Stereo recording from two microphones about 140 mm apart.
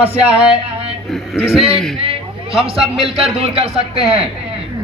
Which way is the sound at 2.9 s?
40° right (ahead or behind).